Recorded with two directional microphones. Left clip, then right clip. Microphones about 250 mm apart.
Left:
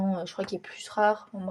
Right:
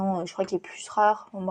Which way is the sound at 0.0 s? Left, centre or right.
Centre.